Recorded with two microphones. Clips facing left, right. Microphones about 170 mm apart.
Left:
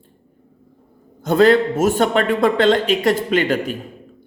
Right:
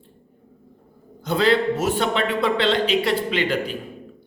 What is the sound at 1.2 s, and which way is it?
A man's voice, 45° left (ahead or behind).